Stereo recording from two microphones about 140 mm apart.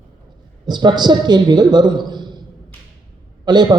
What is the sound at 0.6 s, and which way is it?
A man's voice, 30° right (ahead or behind).